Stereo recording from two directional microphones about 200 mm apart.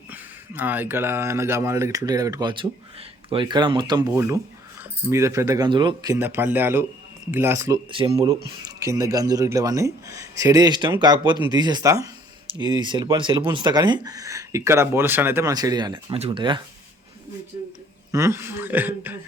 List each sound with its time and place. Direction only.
0.1 s speech: 10° right (ahead or behind)
7.9 s speech: 25° right (ahead or behind)
18.1 s speech: 15° right (ahead or behind)